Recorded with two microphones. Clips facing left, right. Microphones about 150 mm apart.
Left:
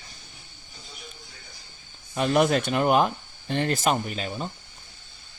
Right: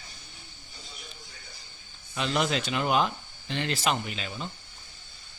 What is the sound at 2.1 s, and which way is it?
Speech, 50° left (ahead or behind).